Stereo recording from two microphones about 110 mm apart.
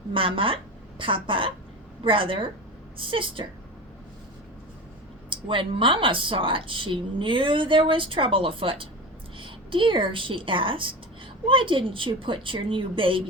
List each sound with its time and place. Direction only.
0.1 s a woman's voice: 50° right (ahead or behind)
5.3 s a woman's voice: 50° right (ahead or behind)